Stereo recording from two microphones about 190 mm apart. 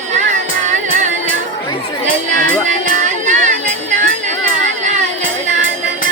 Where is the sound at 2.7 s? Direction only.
40° right (ahead or behind).